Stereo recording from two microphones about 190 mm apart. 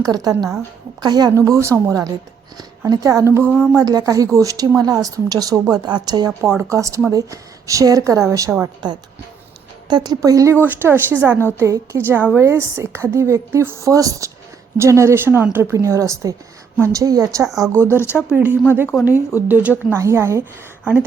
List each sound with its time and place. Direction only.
0.0 s a woman's voice: 20° right (ahead or behind)
3.5 s speech: 5° right (ahead or behind)
3.8 s a woman's voice: 20° right (ahead or behind)
17.9 s speech: 10° left (ahead or behind)
18.3 s a woman's voice: 5° right (ahead or behind)